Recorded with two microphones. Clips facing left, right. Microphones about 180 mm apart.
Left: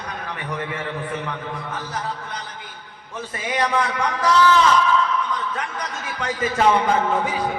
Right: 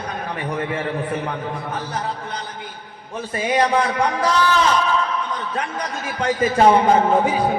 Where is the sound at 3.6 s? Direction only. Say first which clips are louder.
Right 1 dB; 30° right (ahead or behind).